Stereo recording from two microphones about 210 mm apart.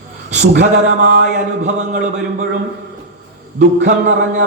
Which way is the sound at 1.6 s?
40° right (ahead or behind).